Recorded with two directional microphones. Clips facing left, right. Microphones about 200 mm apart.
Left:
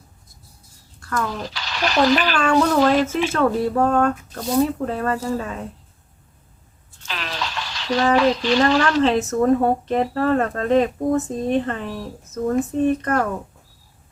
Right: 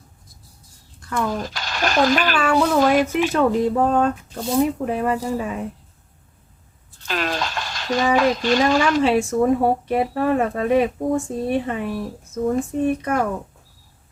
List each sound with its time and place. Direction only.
0.9 s a sound: 20° right (ahead or behind)
1.3 s speech: 45° right (ahead or behind)
2.3 s speech: 5° right (ahead or behind)
7.1 s a sound: 45° right (ahead or behind)
8.1 s speech: 50° right (ahead or behind)
9.0 s speech: 10° right (ahead or behind)